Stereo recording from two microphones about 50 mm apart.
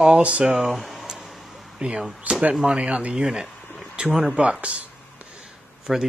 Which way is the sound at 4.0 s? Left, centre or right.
Right.